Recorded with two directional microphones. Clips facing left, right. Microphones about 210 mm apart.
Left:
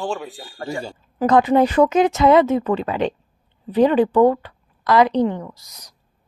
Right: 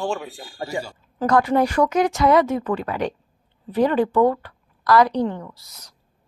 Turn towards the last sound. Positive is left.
turn(degrees=15)  # may be behind; listen again after turning